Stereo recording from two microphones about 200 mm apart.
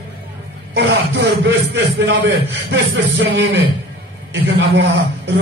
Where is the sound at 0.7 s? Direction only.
60° right (ahead or behind).